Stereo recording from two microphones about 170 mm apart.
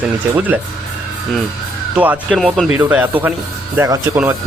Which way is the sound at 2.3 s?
5° left (ahead or behind).